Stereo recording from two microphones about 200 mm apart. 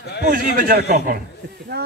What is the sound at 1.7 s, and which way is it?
Speech, 50° right (ahead or behind).